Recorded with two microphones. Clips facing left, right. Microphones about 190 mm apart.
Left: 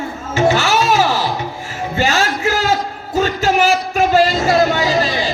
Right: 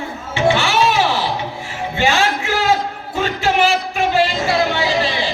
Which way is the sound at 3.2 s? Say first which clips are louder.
Left 2 dB; 40° left (ahead or behind).